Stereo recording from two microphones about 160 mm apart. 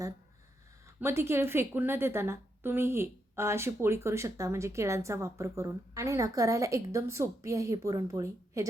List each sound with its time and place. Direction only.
0.9 s a woman's voice: 15° right (ahead or behind)